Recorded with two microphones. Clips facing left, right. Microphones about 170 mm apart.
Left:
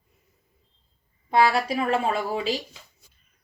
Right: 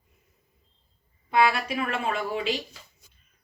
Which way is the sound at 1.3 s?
35° left (ahead or behind).